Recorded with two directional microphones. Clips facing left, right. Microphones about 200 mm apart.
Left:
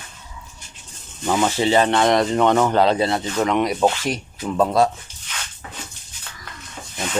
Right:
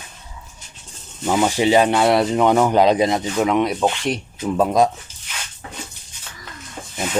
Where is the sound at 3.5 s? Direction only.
Centre (ahead or behind).